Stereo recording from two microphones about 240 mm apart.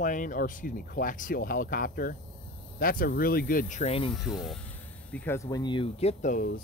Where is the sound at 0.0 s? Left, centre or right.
Left.